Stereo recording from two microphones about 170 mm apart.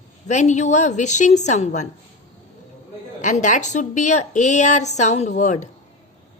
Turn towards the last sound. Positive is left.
turn(degrees=45)  # may be behind; listen again after turning